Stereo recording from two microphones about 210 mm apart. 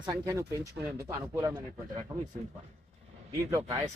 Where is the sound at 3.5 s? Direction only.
15° right (ahead or behind).